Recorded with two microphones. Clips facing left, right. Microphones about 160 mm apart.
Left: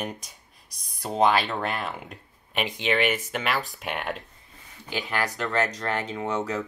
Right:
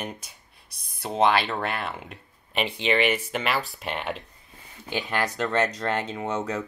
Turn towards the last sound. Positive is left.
turn(degrees=-20)  # may be behind; listen again after turning